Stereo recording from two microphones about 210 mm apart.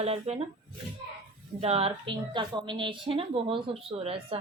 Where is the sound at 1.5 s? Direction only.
30° right (ahead or behind).